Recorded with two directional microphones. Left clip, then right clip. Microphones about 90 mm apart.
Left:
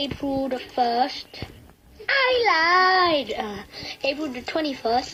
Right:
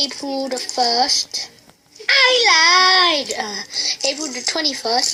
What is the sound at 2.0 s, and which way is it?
A child's voice, 35° left (ahead or behind).